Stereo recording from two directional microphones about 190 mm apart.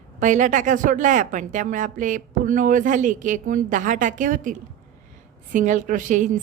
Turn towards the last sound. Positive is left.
turn(degrees=-40)  # may be behind; listen again after turning